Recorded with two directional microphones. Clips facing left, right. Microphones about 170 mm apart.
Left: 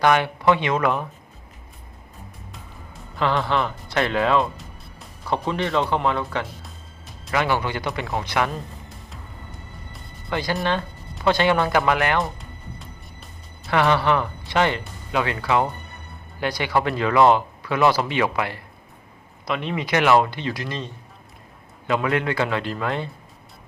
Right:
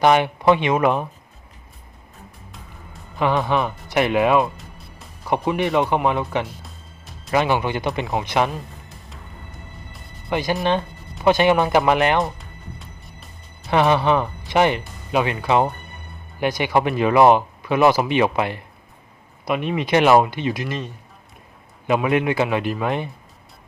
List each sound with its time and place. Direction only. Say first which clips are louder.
0.0 s speech: right 3 dB; 20° right (ahead or behind)
3.2 s speech: right 2 dB; 15° right (ahead or behind)
10.2 s speech: right 3 dB; 20° right (ahead or behind)
13.7 s speech: right 2 dB; 20° right (ahead or behind)